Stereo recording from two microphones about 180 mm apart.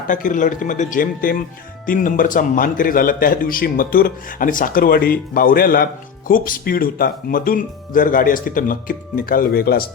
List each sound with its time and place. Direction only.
0.1 s a man's voice: 45° left (ahead or behind)